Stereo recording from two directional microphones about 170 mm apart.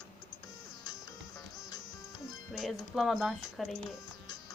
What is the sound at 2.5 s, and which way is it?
Speech, centre (ahead or behind).